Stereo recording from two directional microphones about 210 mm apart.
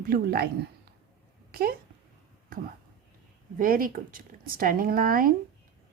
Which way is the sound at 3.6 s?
40° right (ahead or behind).